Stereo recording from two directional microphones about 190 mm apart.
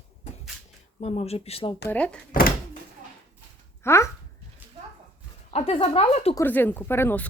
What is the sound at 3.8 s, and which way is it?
Speech, 15° left (ahead or behind).